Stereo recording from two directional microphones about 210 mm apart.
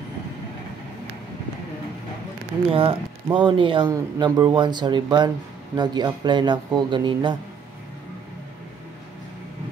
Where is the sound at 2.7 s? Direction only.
25° right (ahead or behind).